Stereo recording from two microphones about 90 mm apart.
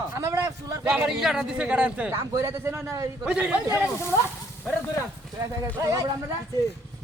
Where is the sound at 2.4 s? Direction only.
35° right (ahead or behind).